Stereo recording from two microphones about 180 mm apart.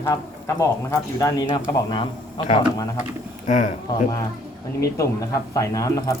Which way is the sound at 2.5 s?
20° left (ahead or behind).